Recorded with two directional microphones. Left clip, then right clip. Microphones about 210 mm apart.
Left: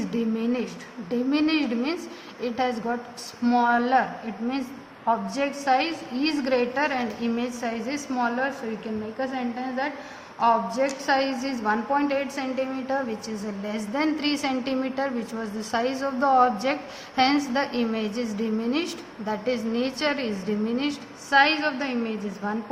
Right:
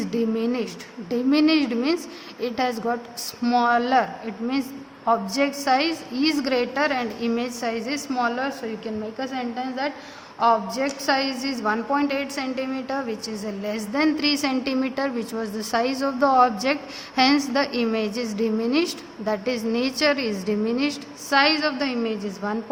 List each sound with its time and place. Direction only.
0.1 s a woman's voice: 50° right (ahead or behind)
5.0 s a woman's voice: 50° right (ahead or behind)